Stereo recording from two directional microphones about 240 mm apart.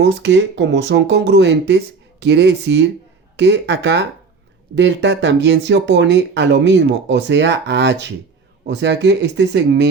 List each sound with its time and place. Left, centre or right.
0.0 s speech: right